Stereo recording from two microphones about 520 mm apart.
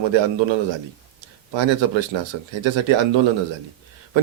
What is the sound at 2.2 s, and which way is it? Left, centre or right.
Speech, right.